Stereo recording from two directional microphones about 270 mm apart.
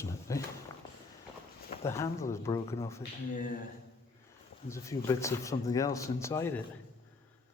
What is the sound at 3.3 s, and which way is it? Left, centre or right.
Speech, left.